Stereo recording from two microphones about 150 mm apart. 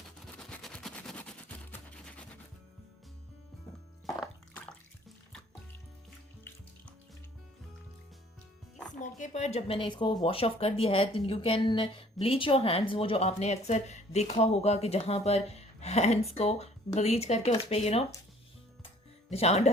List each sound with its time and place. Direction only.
0.3 s a sound: 5° left (ahead or behind)
9.0 s a woman's voice: 55° left (ahead or behind)
19.3 s a woman's voice: 45° left (ahead or behind)